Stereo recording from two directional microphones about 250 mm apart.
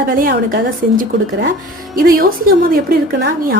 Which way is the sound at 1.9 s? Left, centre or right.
Right.